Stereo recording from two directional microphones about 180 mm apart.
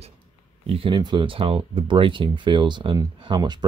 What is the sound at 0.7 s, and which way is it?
Speech, 30° right (ahead or behind).